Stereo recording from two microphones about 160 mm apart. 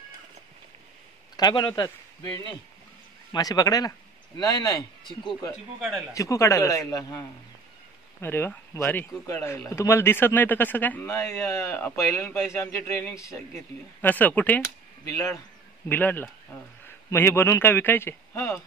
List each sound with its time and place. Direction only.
1.3 s a man's voice: 25° left (ahead or behind)
5.8 s a man's voice: centre (ahead or behind)
6.1 s a man's voice: 20° left (ahead or behind)
15.9 s speech: 10° left (ahead or behind)